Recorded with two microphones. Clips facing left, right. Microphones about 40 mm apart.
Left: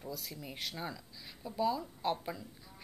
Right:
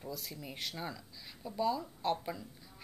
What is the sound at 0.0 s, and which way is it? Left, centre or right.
A woman's voice, centre.